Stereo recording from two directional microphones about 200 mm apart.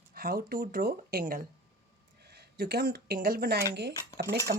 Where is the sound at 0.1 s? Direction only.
45° right (ahead or behind).